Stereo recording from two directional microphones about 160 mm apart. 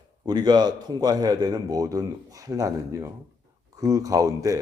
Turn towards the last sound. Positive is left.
turn(degrees=-20)  # may be behind; listen again after turning